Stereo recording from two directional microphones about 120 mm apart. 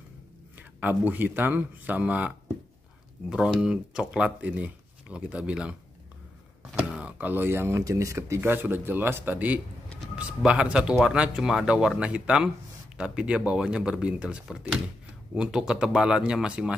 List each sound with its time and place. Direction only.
0.6 s speech: 15° right (ahead or behind)